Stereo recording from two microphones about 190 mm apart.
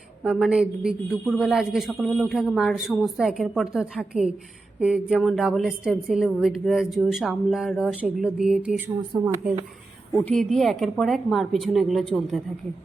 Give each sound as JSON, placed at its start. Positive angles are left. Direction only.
{"t": 0.2, "sound": "a man's voice", "side_deg": -5}
{"t": 9.0, "sound": "speech", "side_deg": -20}
{"t": 10.2, "sound": "a man's voice", "side_deg": 0}